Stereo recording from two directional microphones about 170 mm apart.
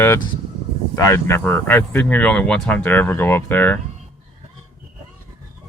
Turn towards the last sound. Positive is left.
turn(degrees=10)  # may be behind; listen again after turning